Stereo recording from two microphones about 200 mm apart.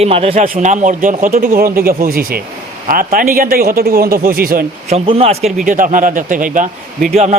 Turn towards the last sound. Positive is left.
turn(degrees=-35)  # may be behind; listen again after turning